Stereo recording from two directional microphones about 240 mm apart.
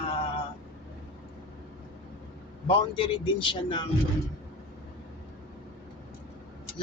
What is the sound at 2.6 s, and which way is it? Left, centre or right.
Speech, left.